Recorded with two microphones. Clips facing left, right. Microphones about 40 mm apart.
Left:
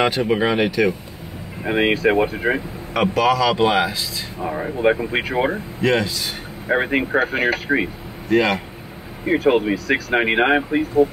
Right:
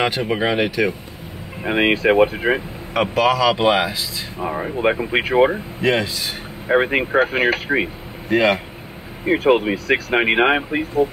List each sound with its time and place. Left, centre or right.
0.0 s speech: centre
1.6 s speech: right
2.9 s speech: centre; by 10.1 s right
10.1 s speech: centre